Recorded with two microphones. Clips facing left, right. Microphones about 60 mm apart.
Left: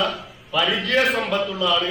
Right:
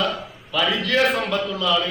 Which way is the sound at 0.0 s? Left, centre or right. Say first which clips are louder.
Even; centre.